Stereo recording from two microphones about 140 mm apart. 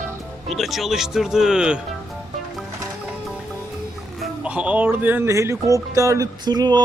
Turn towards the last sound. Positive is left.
turn(degrees=-30)  # may be behind; listen again after turning